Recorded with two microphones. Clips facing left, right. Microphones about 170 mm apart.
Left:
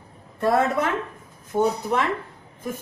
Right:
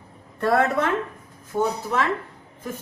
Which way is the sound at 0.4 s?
10° left (ahead or behind).